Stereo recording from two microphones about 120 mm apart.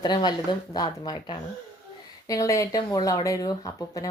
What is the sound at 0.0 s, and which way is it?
Speech, 35° left (ahead or behind).